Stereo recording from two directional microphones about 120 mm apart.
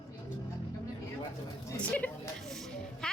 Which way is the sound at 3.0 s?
5° left (ahead or behind).